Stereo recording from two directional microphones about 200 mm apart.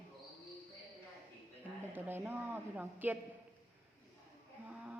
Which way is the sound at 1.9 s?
10° right (ahead or behind).